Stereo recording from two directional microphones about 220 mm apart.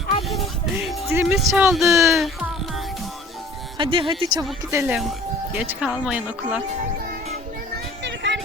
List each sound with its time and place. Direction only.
0.3 s music: centre (ahead or behind)
1.1 s speech: 5° right (ahead or behind)
3.8 s speech: 25° right (ahead or behind)
4.7 s speech: 10° right (ahead or behind)
8.0 s music: 55° right (ahead or behind)